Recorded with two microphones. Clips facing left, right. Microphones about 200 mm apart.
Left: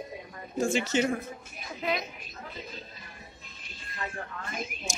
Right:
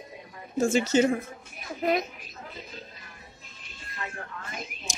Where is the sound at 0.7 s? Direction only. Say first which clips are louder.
Right 6 dB; 40° right (ahead or behind).